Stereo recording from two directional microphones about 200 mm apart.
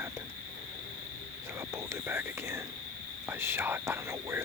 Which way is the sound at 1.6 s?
15° right (ahead or behind).